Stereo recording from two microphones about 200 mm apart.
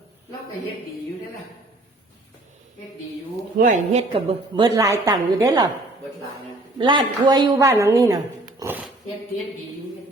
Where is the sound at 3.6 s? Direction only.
35° right (ahead or behind); by 5.6 s 20° right (ahead or behind).